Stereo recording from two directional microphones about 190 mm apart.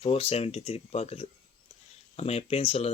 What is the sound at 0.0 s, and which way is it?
Speech, 30° left (ahead or behind).